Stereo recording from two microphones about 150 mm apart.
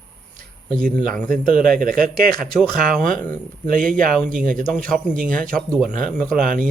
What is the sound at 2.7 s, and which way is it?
Speech, 65° right (ahead or behind).